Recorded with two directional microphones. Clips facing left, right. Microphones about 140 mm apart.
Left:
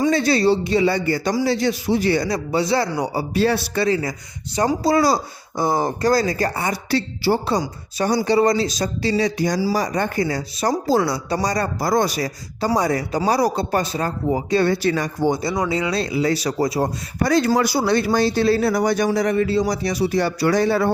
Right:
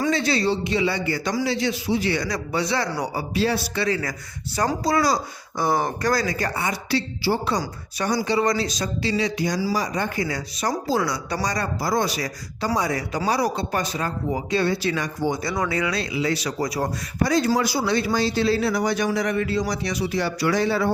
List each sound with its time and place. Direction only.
0.1 s speech: 40° left (ahead or behind)
3.3 s speech: 55° left (ahead or behind)
3.8 s speech: 25° left (ahead or behind); by 7.3 s 50° left (ahead or behind)
7.6 s speech: 30° left (ahead or behind)
14.6 s speech: 50° left (ahead or behind)
15.4 s speech: 20° left (ahead or behind)
17.2 s speech: 65° left (ahead or behind)